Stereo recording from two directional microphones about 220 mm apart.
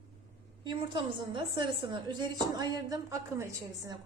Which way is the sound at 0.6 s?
20° right (ahead or behind).